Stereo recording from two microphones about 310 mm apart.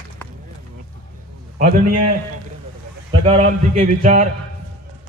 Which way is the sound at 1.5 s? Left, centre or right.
Right.